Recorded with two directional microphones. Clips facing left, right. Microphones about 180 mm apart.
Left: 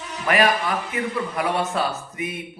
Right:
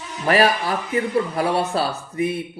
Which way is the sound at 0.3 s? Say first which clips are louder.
Right 2 dB; 35° right (ahead or behind).